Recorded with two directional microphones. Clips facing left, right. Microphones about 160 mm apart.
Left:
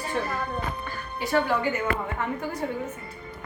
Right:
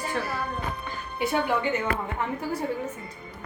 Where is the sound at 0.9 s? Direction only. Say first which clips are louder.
Right 2 dB; 20° right (ahead or behind).